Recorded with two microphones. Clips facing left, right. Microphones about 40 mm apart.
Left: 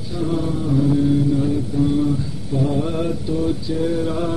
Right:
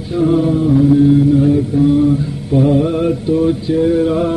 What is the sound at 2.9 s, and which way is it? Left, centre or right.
Mantra, right.